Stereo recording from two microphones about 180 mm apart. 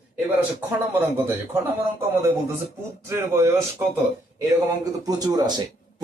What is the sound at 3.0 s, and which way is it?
Speech, 15° right (ahead or behind).